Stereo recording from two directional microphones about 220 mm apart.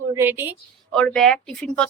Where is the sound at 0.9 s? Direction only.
5° left (ahead or behind).